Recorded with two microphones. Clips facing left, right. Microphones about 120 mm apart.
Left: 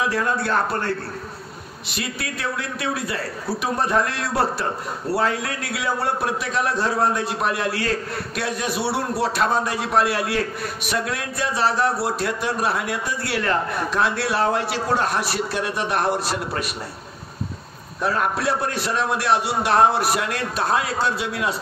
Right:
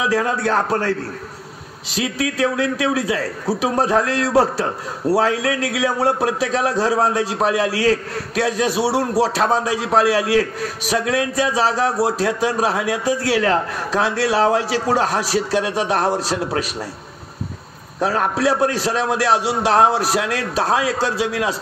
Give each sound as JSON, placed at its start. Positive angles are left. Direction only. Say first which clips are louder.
{"t": 0.0, "sound": "a man's voice", "louder": "right 3 dB", "side_deg": -90}
{"t": 2.0, "sound": "a man's voice", "louder": "right 9 dB", "side_deg": -90}
{"t": 18.3, "sound": "a man's voice", "louder": "right 6 dB", "side_deg": -90}